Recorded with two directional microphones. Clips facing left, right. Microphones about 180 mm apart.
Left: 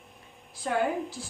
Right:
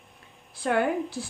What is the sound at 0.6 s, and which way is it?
Speech, 65° right (ahead or behind).